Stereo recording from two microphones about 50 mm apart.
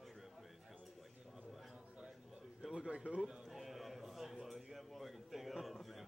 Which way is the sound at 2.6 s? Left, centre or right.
Centre.